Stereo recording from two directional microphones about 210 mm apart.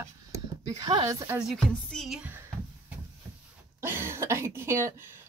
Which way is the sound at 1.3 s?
Centre (ahead or behind).